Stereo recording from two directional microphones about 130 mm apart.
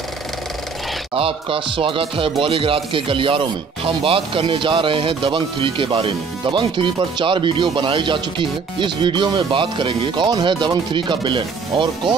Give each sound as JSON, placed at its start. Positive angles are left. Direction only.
{"t": 1.1, "sound": "speech", "side_deg": -45}